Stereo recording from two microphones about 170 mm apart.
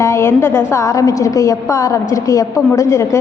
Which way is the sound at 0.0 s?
15° left (ahead or behind).